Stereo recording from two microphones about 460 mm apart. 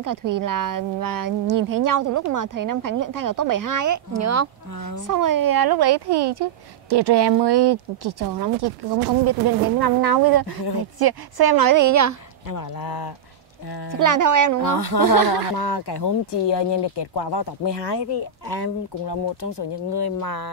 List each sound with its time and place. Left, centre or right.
0.0 s speech: right
12.4 s speech: left
13.9 s speech: right
15.1 s speech: right
15.5 s speech: left